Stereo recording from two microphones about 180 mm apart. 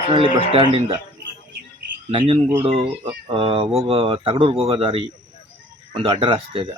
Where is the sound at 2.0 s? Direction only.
30° right (ahead or behind).